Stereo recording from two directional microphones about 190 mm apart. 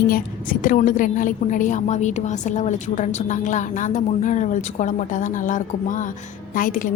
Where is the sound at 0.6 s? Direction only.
45° left (ahead or behind).